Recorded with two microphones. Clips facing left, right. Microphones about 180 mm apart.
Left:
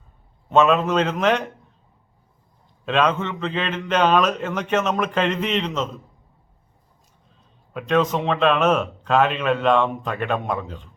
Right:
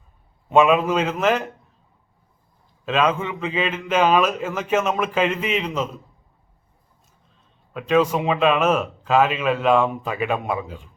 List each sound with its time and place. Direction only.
0.5 s a man's voice: 10° right (ahead or behind)
2.8 s a man's voice: 5° right (ahead or behind)
7.7 s a man's voice: centre (ahead or behind)